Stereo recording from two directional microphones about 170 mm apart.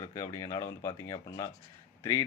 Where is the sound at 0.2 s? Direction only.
20° left (ahead or behind).